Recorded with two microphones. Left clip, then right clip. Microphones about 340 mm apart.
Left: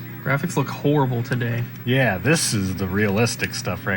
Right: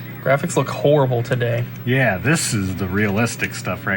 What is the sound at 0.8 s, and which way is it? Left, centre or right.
Speech, right.